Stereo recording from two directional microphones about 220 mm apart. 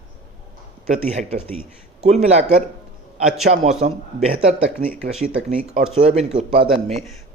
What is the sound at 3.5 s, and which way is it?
Speech, 50° right (ahead or behind).